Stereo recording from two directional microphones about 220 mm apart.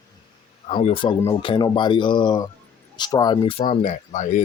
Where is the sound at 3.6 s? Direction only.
35° left (ahead or behind).